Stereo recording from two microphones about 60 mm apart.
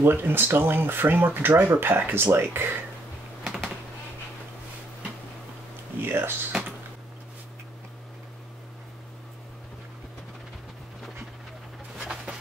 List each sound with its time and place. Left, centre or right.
0.0 s speech: right
3.4 s computer keyboard: centre
6.0 s speech: right
12.0 s a sound: centre